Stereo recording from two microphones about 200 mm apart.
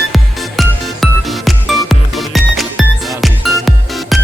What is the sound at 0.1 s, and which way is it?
Music, centre (ahead or behind).